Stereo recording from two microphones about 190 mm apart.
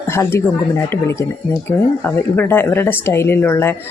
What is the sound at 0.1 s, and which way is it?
Speech, 15° left (ahead or behind).